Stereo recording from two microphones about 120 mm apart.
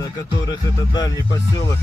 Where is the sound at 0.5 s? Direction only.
35° left (ahead or behind).